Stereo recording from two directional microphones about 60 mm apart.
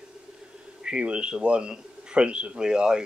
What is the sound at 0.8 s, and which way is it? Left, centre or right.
A man's voice, centre.